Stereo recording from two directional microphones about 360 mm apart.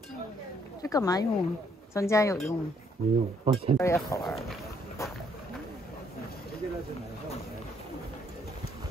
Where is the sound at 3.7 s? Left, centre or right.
Centre.